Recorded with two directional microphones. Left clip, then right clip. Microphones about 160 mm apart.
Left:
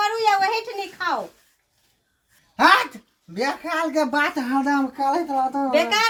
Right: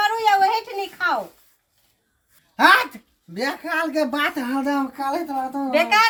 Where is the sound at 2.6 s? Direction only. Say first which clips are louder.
Right 1 dB; 10° right (ahead or behind); by 5.6 s 35° right (ahead or behind).